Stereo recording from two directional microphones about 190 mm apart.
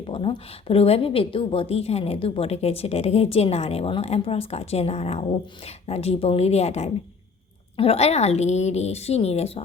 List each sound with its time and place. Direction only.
0.1 s a woman's voice: 30° left (ahead or behind)